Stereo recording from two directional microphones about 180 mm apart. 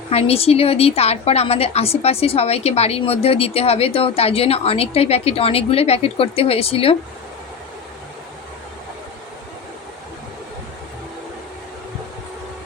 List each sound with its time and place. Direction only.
0.1 s a woman's voice: 35° left (ahead or behind)